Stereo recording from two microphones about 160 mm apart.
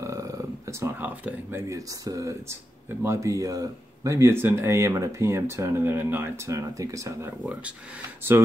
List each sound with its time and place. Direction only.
0.0 s speech: 20° right (ahead or behind)